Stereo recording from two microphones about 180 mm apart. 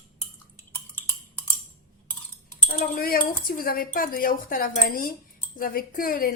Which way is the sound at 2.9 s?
55° left (ahead or behind).